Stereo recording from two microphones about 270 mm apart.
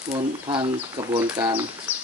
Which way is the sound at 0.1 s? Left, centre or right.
Centre.